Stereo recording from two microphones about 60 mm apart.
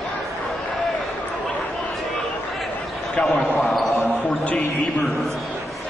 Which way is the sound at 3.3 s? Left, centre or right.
Left.